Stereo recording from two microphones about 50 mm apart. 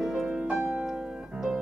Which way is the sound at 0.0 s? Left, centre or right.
Centre.